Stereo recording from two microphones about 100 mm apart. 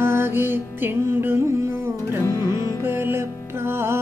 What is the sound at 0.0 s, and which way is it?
Music, 25° right (ahead or behind).